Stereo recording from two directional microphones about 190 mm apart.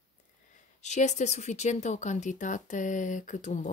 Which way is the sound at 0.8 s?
40° left (ahead or behind).